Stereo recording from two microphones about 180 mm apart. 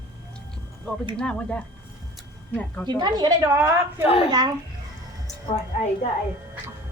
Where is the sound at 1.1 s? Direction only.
5° left (ahead or behind).